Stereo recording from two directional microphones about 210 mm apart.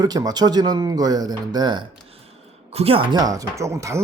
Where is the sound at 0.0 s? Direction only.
20° right (ahead or behind).